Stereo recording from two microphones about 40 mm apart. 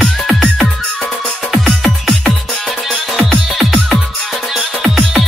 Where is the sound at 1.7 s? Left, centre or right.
Centre.